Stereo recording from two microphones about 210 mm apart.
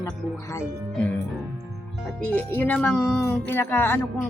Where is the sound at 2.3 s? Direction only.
5° left (ahead or behind).